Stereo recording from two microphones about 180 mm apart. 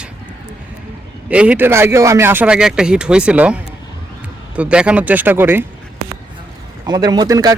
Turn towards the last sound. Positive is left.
turn(degrees=-20)  # may be behind; listen again after turning